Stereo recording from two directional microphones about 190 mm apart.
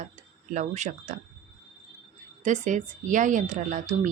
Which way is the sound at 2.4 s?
40° right (ahead or behind).